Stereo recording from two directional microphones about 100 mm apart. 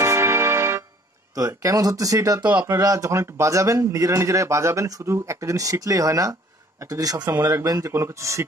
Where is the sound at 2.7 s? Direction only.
35° right (ahead or behind).